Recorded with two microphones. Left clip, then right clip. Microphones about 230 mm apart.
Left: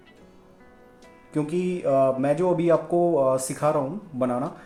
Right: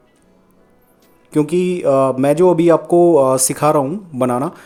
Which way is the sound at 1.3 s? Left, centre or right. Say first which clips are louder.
Right 10 dB; right.